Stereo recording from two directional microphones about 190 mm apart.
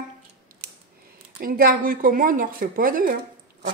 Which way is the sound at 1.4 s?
50° right (ahead or behind).